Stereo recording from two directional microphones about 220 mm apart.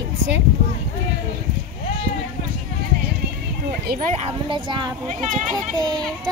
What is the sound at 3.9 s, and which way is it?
Speech, 25° right (ahead or behind).